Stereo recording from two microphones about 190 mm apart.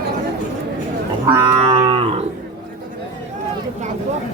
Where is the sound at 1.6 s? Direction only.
30° right (ahead or behind).